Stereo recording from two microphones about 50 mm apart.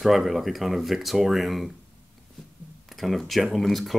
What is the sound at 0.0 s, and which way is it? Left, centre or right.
Speech, centre.